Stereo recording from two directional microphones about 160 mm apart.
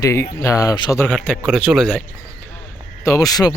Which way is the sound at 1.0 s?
5° left (ahead or behind).